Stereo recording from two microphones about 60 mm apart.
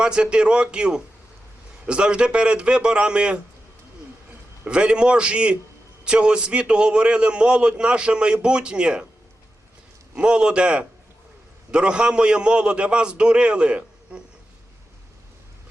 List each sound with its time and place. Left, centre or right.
0.0 s a man's voice: centre
4.6 s a man's voice: centre
10.2 s a man's voice: centre